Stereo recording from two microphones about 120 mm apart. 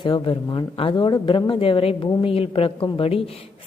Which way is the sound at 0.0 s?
45° left (ahead or behind).